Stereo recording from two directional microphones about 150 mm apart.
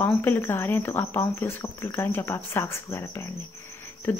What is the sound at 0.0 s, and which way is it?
Cricket, 15° left (ahead or behind).